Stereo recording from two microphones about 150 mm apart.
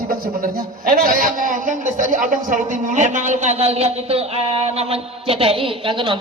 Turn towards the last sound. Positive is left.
turn(degrees=-30)  # may be behind; listen again after turning